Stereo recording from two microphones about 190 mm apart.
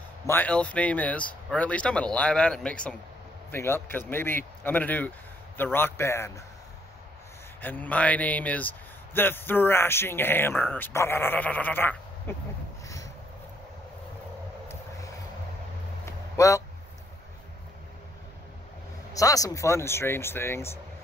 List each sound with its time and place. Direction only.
0.3 s speech: 10° left (ahead or behind)
7.6 s speech: 10° left (ahead or behind)
12.8 s a sound: 15° left (ahead or behind)
14.7 s vehicle: 15° left (ahead or behind)
16.1 s a sound: 15° left (ahead or behind)
19.1 s speech: 20° left (ahead or behind)